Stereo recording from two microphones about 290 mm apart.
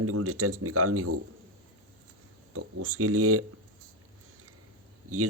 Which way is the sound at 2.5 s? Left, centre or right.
Right.